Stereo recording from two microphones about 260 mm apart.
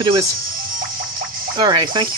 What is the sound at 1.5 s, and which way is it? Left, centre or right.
Speech, centre.